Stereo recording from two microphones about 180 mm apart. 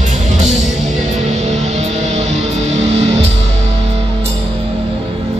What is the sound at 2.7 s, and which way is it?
Music, 35° right (ahead or behind).